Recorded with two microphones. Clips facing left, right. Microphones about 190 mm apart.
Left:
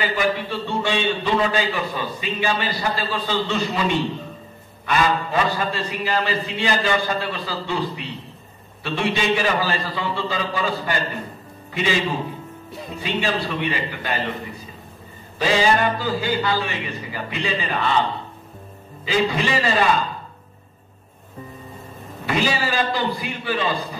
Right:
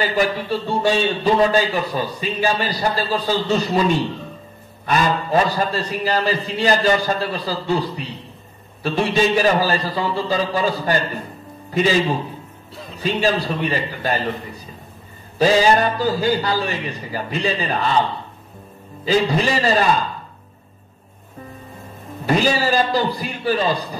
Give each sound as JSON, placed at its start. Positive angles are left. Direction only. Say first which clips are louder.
{"t": 0.0, "sound": "a man's voice", "louder": "right 2 dB", "side_deg": -40}
{"t": 13.0, "sound": "a man's voice", "louder": "right 5 dB", "side_deg": -40}
{"t": 15.3, "sound": "a man's voice", "louder": "right 4 dB", "side_deg": -40}
{"t": 19.0, "sound": "a man's voice", "louder": "right 3 dB", "side_deg": -40}
{"t": 22.2, "sound": "a man's voice", "louder": "right 4 dB", "side_deg": -40}